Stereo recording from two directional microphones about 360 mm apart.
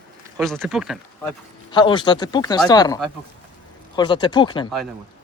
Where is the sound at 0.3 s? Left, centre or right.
Centre.